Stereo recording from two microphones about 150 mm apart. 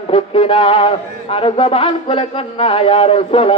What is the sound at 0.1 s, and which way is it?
A man's voice, 35° left (ahead or behind).